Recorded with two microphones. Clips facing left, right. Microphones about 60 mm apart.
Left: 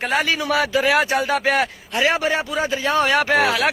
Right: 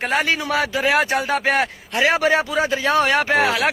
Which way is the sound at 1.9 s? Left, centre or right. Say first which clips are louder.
Right 1 dB; right.